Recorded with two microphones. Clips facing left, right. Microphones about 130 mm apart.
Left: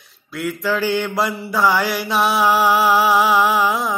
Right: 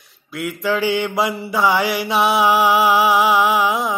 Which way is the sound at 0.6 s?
15° right (ahead or behind).